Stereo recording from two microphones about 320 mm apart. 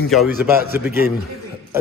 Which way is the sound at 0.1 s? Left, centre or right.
Centre.